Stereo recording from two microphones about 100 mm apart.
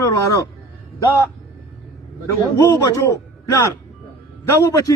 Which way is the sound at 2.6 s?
35° left (ahead or behind).